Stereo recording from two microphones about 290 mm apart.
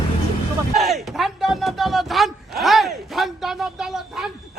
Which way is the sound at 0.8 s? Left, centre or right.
Centre.